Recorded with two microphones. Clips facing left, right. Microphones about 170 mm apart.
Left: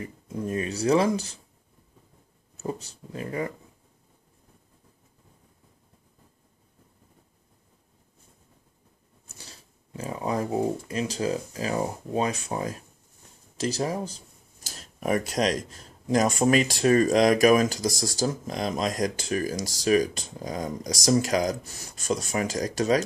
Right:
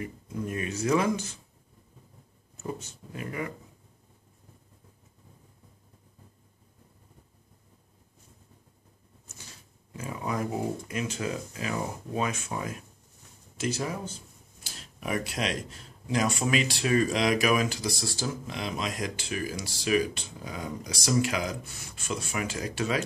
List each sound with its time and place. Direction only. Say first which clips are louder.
0.0 s speech: left 2 dB; 30° left (ahead or behind)
2.5 s speech: left 3 dB; 35° left (ahead or behind)
9.3 s speech: left 2 dB; 35° left (ahead or behind)